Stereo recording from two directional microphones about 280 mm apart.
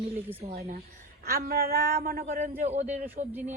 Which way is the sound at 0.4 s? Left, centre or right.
Centre.